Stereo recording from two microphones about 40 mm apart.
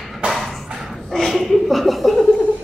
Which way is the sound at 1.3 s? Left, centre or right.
Centre.